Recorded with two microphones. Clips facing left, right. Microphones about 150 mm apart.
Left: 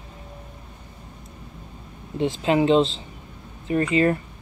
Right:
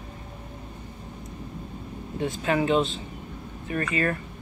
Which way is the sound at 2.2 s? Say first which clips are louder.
Left 5 dB; 25° left (ahead or behind).